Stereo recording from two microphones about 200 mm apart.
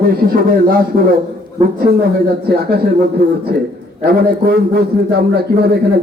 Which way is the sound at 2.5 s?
50° right (ahead or behind).